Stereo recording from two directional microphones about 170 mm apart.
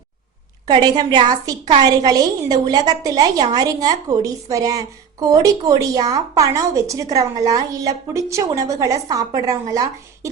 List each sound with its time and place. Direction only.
0.7 s a woman's voice: 25° right (ahead or behind)